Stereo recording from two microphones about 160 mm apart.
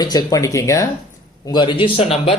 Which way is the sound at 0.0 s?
25° left (ahead or behind).